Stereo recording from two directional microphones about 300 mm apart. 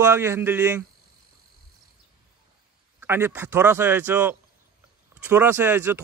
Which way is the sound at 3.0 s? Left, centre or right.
Centre.